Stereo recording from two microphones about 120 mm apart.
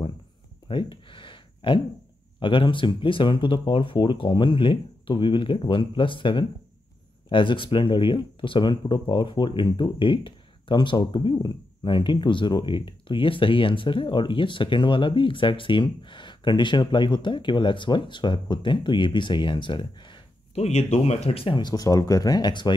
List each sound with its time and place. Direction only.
0.7 s a sound: 45° left (ahead or behind)
2.4 s speech: 45° left (ahead or behind)
20.5 s speech: 65° left (ahead or behind); by 22.8 s 40° left (ahead or behind)